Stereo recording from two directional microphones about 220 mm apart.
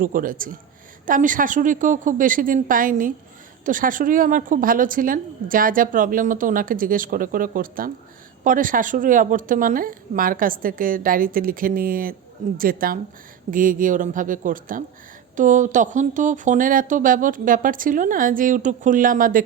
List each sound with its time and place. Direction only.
0.0 s a woman's voice: 40° right (ahead or behind)